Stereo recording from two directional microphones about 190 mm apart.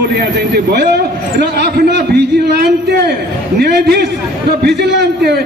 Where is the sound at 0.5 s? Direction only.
55° right (ahead or behind).